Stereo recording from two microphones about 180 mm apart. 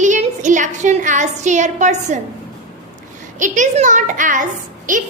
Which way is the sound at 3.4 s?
45° right (ahead or behind).